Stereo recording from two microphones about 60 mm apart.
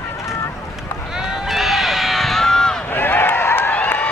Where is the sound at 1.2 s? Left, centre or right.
Centre.